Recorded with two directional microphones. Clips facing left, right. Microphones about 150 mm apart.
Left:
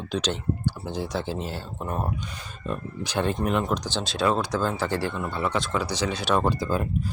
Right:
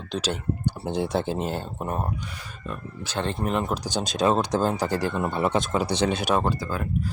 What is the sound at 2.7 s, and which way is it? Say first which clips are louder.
Speech: left 4 dB; 30° left (ahead or behind).